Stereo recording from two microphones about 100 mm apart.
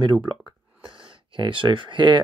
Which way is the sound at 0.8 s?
60° right (ahead or behind).